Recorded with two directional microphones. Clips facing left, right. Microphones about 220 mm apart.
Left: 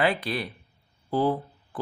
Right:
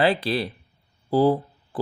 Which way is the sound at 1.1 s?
35° right (ahead or behind).